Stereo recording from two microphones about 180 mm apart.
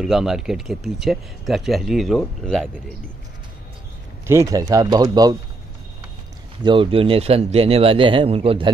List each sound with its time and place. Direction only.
0.0 s speech: centre (ahead or behind)
4.3 s speech: 15° right (ahead or behind)
6.6 s speech: 30° right (ahead or behind)